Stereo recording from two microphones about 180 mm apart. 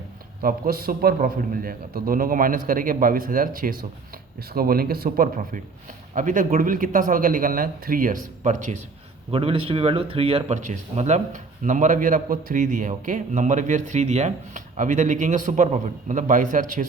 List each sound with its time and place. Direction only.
0.4 s speech: 55° right (ahead or behind)
9.3 s speech: 30° right (ahead or behind)